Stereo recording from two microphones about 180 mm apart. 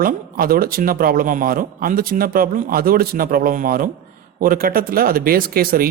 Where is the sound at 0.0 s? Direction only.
55° right (ahead or behind).